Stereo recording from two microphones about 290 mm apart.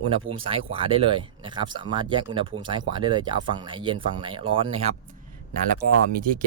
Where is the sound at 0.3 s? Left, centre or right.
Right.